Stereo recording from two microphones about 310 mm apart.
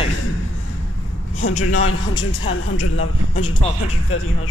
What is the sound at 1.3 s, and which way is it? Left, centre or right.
A man's voice, left.